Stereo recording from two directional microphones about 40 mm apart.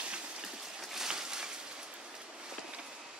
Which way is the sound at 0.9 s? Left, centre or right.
Centre.